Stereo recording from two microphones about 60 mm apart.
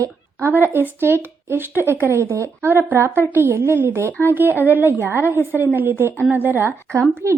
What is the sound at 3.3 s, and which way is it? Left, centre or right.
Speech, right.